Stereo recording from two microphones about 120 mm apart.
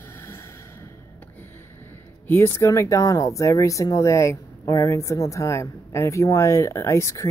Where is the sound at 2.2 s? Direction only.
20° left (ahead or behind).